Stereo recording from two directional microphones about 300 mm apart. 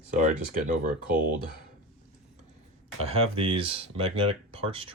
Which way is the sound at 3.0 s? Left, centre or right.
Centre.